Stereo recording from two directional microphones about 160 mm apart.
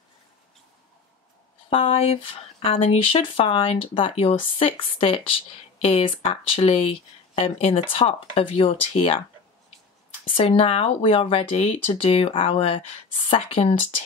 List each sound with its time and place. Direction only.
1.7 s speech: 35° left (ahead or behind)
10.3 s speech: 35° left (ahead or behind)